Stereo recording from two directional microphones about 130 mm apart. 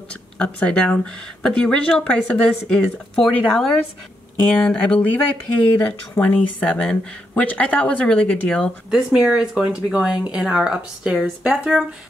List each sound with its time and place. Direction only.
0.1 s speech: 10° left (ahead or behind)
8.9 s speech: 5° right (ahead or behind)